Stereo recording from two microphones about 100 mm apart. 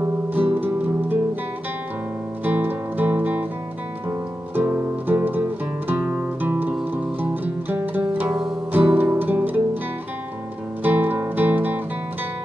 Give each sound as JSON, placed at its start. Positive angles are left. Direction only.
{"t": 0.0, "sound": "music", "side_deg": -20}
{"t": 2.4, "sound": "music", "side_deg": -20}
{"t": 4.6, "sound": "music", "side_deg": -15}
{"t": 7.7, "sound": "music", "side_deg": -20}
{"t": 10.8, "sound": "music", "side_deg": -20}